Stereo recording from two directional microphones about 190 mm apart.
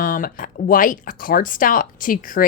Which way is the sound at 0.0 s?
45° left (ahead or behind).